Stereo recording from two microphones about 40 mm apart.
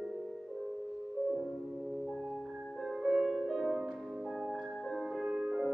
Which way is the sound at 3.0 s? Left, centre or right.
Centre.